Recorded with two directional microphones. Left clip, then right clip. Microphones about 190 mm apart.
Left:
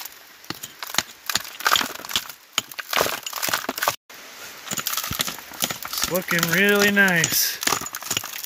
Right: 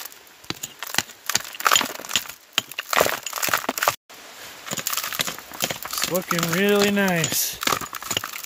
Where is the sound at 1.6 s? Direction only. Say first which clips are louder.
Right 1 dB; 15° right (ahead or behind).